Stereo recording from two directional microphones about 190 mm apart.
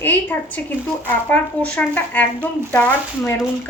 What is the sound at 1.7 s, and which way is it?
A woman's voice, 10° left (ahead or behind).